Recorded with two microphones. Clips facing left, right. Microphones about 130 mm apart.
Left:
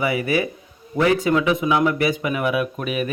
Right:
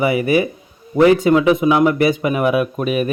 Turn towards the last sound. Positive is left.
turn(degrees=-20)  # may be behind; listen again after turning